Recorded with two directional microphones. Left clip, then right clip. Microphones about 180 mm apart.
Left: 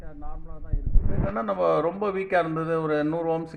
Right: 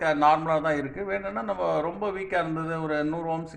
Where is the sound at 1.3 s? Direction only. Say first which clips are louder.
Left 6 dB; 45° left (ahead or behind).